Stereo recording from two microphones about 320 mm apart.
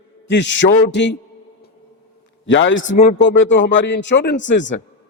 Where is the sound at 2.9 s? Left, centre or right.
Left.